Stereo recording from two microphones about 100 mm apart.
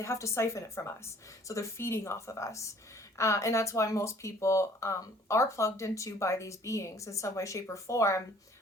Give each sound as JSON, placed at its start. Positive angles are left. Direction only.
{"t": 0.0, "sound": "speech", "side_deg": 30}